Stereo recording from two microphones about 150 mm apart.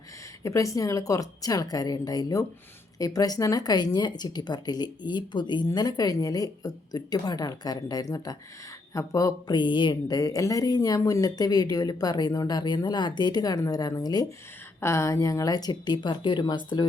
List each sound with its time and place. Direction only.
0.4 s speech: 20° left (ahead or behind)